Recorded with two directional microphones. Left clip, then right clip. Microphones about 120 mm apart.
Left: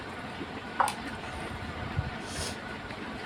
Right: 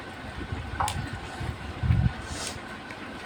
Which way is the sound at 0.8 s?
50° left (ahead or behind).